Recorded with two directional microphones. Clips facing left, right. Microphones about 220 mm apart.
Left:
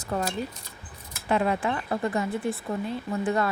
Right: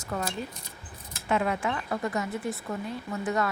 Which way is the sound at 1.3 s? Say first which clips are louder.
Left 2 dB; 35° left (ahead or behind).